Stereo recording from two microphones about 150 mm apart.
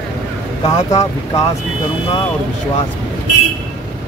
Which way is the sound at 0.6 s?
25° left (ahead or behind).